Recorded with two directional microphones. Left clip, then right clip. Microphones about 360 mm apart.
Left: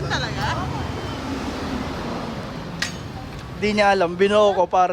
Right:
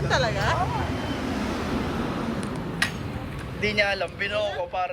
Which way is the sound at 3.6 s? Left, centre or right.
Centre.